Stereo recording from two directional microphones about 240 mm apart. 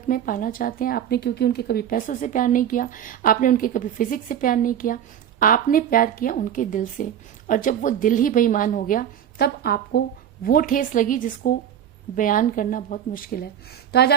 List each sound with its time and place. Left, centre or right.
0.1 s a woman's voice: left